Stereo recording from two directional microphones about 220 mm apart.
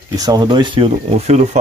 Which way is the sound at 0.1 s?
15° right (ahead or behind).